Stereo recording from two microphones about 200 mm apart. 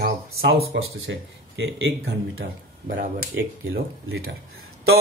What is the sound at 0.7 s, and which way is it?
A man's voice, 60° right (ahead or behind).